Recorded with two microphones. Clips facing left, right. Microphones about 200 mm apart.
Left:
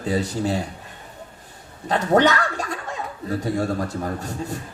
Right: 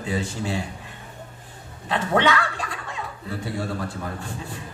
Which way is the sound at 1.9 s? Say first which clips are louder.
Left 4 dB; 40° left (ahead or behind).